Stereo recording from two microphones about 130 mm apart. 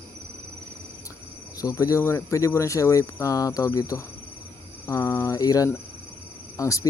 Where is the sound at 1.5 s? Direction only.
25° left (ahead or behind).